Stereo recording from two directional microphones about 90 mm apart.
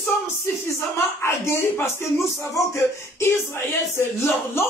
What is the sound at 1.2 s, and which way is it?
Speech, 30° left (ahead or behind).